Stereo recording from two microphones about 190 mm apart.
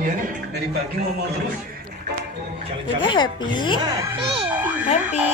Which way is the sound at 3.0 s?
25° left (ahead or behind).